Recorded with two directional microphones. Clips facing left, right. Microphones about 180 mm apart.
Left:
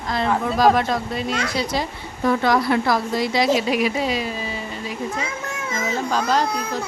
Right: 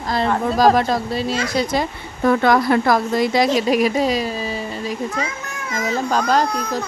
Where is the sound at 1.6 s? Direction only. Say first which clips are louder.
Right 4 dB; 50° right (ahead or behind).